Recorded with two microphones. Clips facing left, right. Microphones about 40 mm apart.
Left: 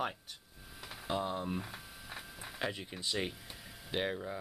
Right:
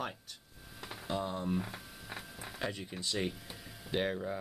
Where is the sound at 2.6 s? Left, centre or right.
Centre.